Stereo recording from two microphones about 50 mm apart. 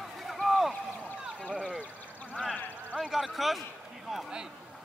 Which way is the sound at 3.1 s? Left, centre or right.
Centre.